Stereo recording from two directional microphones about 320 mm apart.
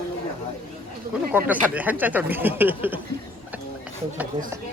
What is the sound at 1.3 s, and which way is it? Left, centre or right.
Speech, centre.